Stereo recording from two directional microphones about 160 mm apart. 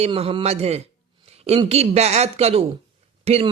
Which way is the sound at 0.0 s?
40° right (ahead or behind).